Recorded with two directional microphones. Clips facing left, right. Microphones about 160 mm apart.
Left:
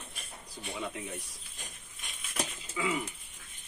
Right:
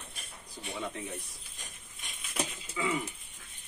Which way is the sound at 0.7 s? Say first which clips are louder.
Even; 5° left (ahead or behind).